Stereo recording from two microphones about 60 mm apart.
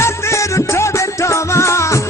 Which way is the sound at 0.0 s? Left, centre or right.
Left.